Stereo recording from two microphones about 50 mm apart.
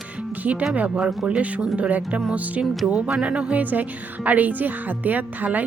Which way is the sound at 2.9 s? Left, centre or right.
Centre.